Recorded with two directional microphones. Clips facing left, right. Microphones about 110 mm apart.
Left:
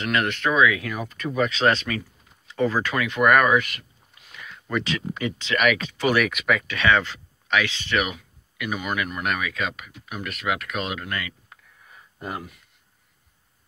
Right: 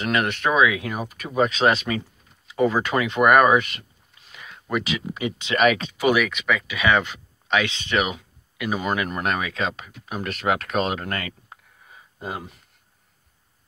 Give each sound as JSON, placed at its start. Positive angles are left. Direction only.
{"t": 0.0, "sound": "speech", "side_deg": -20}
{"t": 5.9, "sound": "speech", "side_deg": -15}
{"t": 6.2, "sound": "speech", "side_deg": 0}
{"t": 6.7, "sound": "speech", "side_deg": -15}
{"t": 11.4, "sound": "a sound", "side_deg": -20}